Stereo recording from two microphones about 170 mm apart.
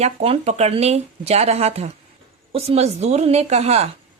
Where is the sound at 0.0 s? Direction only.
40° right (ahead or behind).